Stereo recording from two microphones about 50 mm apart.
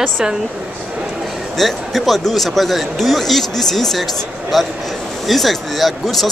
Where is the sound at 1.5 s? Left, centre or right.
Centre.